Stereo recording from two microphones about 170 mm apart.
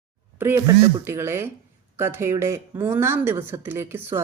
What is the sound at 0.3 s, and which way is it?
Speech, 15° right (ahead or behind).